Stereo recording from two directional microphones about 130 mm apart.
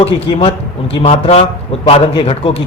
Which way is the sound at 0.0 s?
50° left (ahead or behind).